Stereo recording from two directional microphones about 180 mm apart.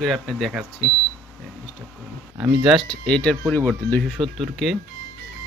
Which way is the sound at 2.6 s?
Centre (ahead or behind).